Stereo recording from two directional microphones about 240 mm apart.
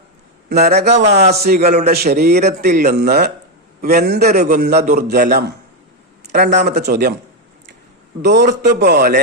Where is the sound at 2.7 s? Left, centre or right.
Right.